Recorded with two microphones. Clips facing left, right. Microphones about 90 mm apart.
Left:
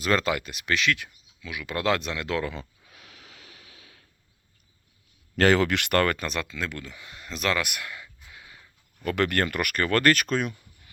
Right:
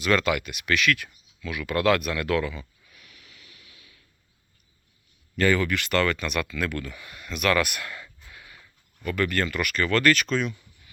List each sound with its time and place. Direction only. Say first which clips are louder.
0.0 s speech: right 1 dB; 35° left (ahead or behind)
2.5 s a sound: left 2 dB; 65° left (ahead or behind); by 3.1 s 80° left
5.4 s speech: left 2 dB; 85° left; by 6.2 s 50° left (ahead or behind)
6.2 s speech: right 3 dB; 30° left (ahead or behind)
7.5 s a sound: right 4 dB; 15° left (ahead or behind)
9.0 s speech: left 1 dB; 60° left (ahead or behind)